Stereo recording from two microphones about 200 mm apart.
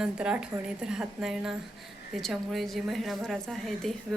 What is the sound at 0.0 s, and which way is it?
A woman's voice, 5° right (ahead or behind).